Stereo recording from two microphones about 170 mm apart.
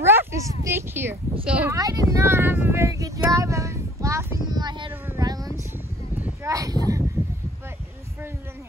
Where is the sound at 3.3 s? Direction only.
20° right (ahead or behind).